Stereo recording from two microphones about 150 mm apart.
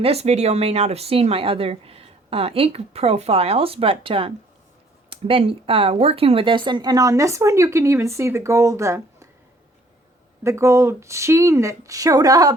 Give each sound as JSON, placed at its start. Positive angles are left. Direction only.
{"t": 0.0, "sound": "speech", "side_deg": -45}
{"t": 10.4, "sound": "speech", "side_deg": -20}